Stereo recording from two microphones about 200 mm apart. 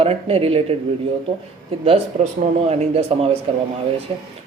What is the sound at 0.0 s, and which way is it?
Speech, 30° right (ahead or behind).